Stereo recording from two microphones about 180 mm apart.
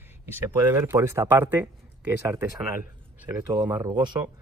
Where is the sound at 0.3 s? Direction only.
10° right (ahead or behind).